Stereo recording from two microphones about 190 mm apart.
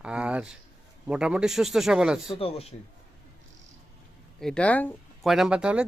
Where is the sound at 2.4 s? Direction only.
30° left (ahead or behind).